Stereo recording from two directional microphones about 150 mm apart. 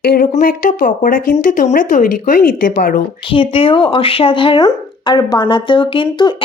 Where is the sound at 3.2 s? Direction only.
35° left (ahead or behind).